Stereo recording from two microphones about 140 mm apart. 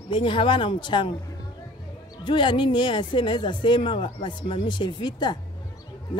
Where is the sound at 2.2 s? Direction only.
35° left (ahead or behind).